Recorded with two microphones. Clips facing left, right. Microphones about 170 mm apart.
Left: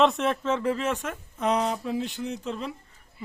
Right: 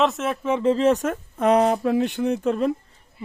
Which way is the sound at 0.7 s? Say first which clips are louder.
Right 9 dB; 35° right (ahead or behind).